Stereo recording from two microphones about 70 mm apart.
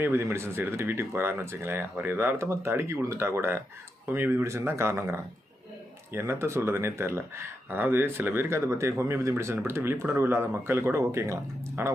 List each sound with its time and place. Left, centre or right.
0.0 s speech: right
2.4 s speech: right
4.4 s speech: right